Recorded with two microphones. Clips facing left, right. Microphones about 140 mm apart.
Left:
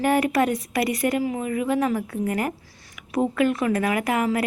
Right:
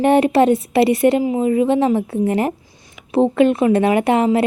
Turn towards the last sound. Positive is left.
turn(degrees=-25)  # may be behind; listen again after turning